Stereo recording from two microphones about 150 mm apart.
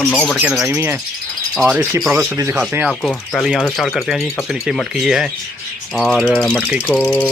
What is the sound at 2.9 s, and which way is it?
Speech, 5° left (ahead or behind).